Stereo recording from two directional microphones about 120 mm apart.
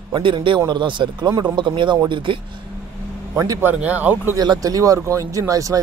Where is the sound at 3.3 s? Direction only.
25° right (ahead or behind).